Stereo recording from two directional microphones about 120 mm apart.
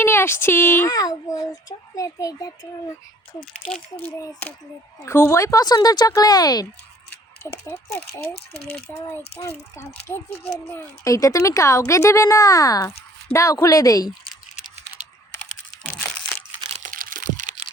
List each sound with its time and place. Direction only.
0.0 s speech: 20° left (ahead or behind)
0.9 s speech: 30° left (ahead or behind)
5.0 s speech: 20° left (ahead or behind)
8.3 s speech: 55° left (ahead or behind)
8.9 s speech: 20° left (ahead or behind)
16.7 s crack: 90° right